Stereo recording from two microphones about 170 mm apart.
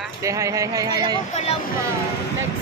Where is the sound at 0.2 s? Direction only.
20° right (ahead or behind).